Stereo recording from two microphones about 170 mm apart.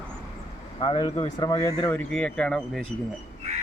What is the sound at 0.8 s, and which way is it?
Speech, 25° left (ahead or behind).